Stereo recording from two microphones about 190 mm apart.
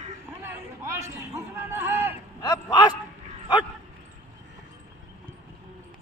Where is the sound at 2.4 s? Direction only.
25° left (ahead or behind).